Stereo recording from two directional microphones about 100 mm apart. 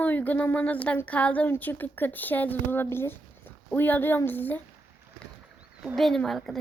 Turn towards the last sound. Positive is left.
turn(degrees=0)  # may be behind; listen again after turning